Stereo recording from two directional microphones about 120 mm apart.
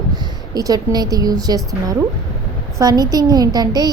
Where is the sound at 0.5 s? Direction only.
30° right (ahead or behind).